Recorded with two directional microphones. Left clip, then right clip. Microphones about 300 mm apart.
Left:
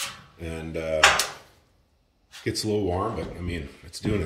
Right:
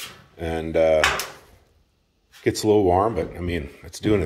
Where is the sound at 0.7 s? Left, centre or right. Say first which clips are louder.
Right 11 dB; right.